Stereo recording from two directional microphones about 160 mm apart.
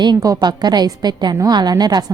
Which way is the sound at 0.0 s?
25° right (ahead or behind).